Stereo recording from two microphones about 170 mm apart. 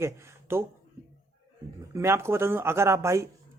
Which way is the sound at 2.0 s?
15° right (ahead or behind).